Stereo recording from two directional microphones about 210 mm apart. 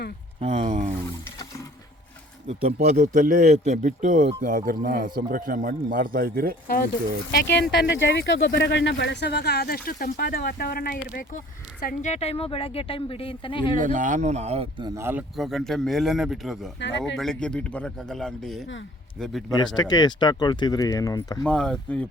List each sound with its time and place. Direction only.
0.3 s a man's voice: 30° right (ahead or behind)
2.5 s a man's voice: 30° right (ahead or behind)
6.7 s a woman's voice: 45° left (ahead or behind); by 13.7 s 25° left (ahead or behind)
13.7 s a man's voice: 35° right (ahead or behind); by 15.2 s 10° right (ahead or behind)
15.4 s speech: centre (ahead or behind)
16.8 s speech: 60° left (ahead or behind)
17.2 s speech: 5° left (ahead or behind)
19.5 s a woman's voice: 20° left (ahead or behind)
21.4 s speech: 5° left (ahead or behind)